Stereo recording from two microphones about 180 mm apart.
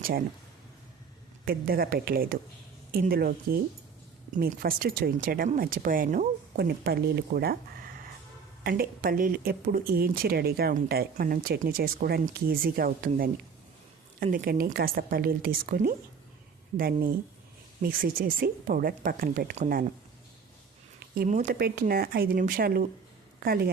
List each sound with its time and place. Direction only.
1.5 s speech: 55° right (ahead or behind)
6.7 s speech: 65° right (ahead or behind)
8.6 s speech: 55° right (ahead or behind)
21.2 s speech: 50° right (ahead or behind)